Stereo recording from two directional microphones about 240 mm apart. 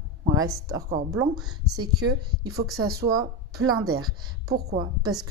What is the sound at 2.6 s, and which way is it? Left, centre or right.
Speech, right.